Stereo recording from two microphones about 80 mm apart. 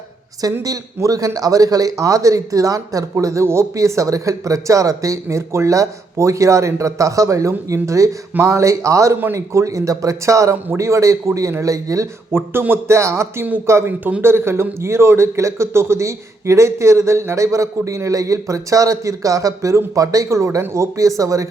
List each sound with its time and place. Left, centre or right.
0.6 s a man's voice: right
12.3 s a man's voice: right